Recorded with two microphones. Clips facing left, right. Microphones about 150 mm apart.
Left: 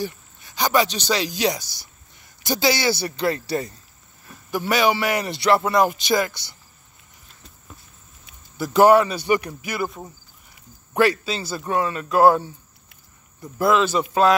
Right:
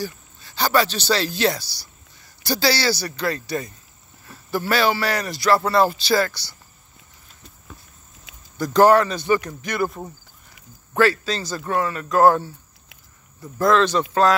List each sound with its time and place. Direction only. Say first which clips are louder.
0.0 s speech: left 1 dB; 20° left (ahead or behind)
4.5 s speech: even; 15° left (ahead or behind)
8.5 s speech: even; 10° left (ahead or behind)
11.0 s speech: even; 10° left (ahead or behind)